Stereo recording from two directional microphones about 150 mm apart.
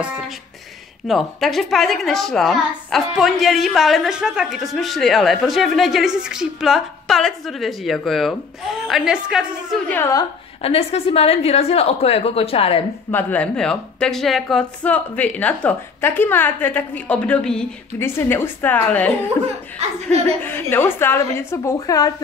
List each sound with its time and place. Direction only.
1.0 s a woman's voice: centre (ahead or behind)
9.8 s speech: 15° left (ahead or behind)
10.6 s a woman's voice: 40° left (ahead or behind)
13.1 s speech: 10° left (ahead or behind)
17.9 s speech: 15° left (ahead or behind)
20.2 s speech: 15° left (ahead or behind)